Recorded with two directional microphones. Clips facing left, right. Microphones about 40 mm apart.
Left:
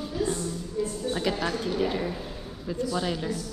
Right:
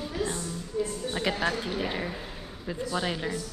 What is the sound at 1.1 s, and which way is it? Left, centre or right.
A woman's voice, centre.